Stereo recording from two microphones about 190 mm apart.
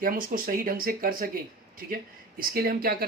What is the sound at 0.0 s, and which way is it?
Speech, 50° right (ahead or behind).